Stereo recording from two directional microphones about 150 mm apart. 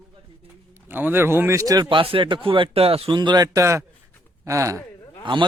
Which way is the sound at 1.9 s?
35° right (ahead or behind).